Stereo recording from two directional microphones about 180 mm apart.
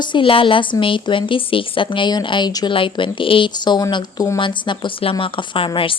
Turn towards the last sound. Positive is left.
turn(degrees=30)  # may be behind; listen again after turning